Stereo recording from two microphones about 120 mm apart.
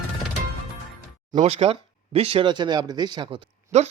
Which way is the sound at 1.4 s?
60° right (ahead or behind).